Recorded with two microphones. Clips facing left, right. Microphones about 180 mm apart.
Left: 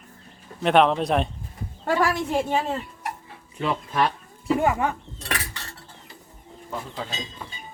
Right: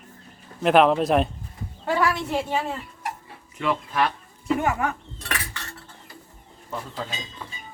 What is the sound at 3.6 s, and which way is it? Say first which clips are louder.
Speech: even; 35° left (ahead or behind).